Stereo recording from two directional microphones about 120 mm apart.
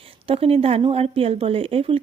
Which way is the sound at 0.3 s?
50° right (ahead or behind).